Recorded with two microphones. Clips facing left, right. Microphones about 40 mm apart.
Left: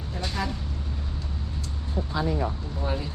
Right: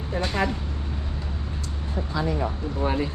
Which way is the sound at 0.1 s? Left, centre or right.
Right.